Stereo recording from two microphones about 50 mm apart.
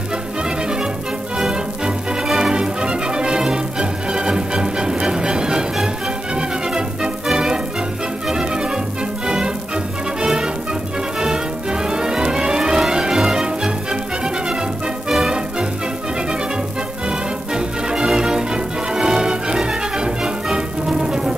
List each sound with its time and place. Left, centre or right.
2.2 s music: centre
10.2 s music: centre
15.0 s music: centre
17.1 s music: centre